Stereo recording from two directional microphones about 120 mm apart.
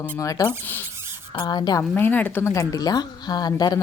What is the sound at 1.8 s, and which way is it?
Speech, 15° left (ahead or behind).